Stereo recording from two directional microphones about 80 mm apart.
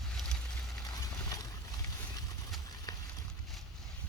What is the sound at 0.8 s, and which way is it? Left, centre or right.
Horse, left.